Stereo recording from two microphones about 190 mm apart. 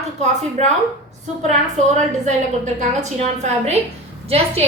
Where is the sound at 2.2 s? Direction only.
40° right (ahead or behind).